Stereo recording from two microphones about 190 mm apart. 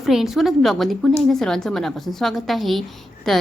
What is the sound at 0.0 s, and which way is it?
A woman's voice, centre (ahead or behind).